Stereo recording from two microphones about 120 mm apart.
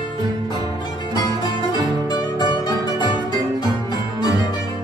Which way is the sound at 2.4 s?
35° left (ahead or behind).